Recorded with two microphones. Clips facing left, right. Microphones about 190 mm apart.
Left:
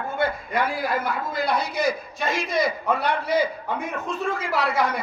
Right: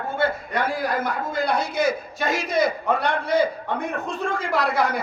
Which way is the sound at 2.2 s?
Centre (ahead or behind).